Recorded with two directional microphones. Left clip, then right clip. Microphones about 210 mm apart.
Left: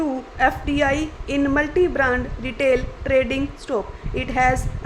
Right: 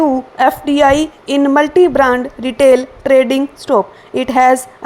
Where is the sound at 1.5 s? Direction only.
30° right (ahead or behind).